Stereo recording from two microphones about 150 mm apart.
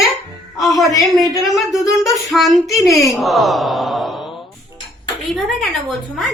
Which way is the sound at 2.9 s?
20° left (ahead or behind).